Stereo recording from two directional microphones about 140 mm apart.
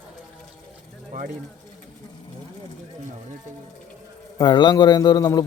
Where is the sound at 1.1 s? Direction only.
70° right (ahead or behind).